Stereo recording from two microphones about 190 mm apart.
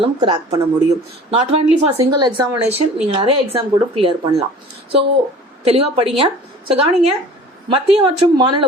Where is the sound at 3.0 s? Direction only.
35° right (ahead or behind).